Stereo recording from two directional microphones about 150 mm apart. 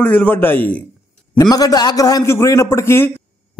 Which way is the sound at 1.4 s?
25° left (ahead or behind).